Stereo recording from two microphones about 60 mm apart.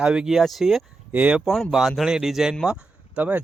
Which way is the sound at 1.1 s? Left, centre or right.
Right.